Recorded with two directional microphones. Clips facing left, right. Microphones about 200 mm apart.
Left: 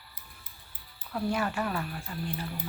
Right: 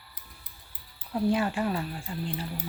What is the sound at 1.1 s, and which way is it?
Speech, 20° right (ahead or behind).